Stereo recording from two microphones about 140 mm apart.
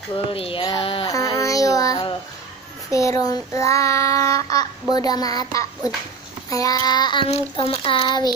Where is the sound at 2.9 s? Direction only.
20° left (ahead or behind).